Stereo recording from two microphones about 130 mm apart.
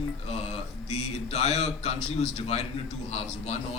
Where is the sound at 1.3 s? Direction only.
55° left (ahead or behind).